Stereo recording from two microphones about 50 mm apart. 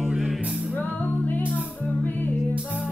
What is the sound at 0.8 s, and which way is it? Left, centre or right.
Music, left.